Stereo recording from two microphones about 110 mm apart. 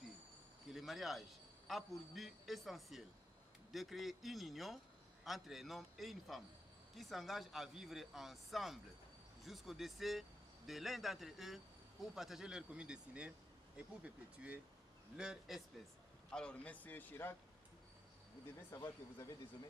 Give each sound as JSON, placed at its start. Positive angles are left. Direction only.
{"t": 0.7, "sound": "a man's voice", "side_deg": 0}
{"t": 16.3, "sound": "a man's voice", "side_deg": 10}
{"t": 19.1, "sound": "speech", "side_deg": 25}